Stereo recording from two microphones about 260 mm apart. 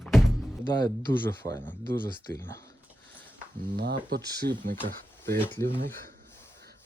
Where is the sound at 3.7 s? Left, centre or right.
Right.